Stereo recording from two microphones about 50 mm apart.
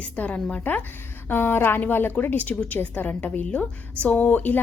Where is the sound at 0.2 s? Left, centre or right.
Left.